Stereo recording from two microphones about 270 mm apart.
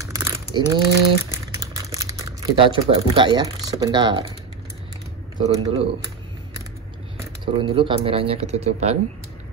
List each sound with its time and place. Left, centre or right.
0.0 s a sound: centre
1.3 s speech: centre
5.4 s speech: right
7.2 s speech: centre